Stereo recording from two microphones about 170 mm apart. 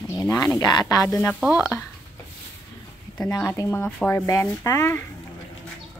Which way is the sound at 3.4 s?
15° left (ahead or behind).